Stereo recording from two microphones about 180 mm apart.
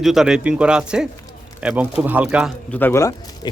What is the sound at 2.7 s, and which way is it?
Speech, 10° left (ahead or behind).